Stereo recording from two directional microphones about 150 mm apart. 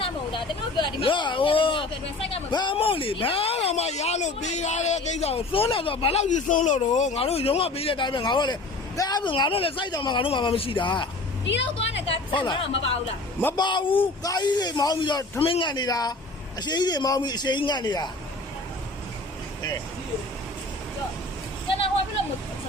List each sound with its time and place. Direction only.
0.0 s vehicle: 35° left (ahead or behind)
2.3 s speech: 30° left (ahead or behind)
6.2 s speech: 60° left (ahead or behind)
7.2 s a man's voice: 40° left (ahead or behind)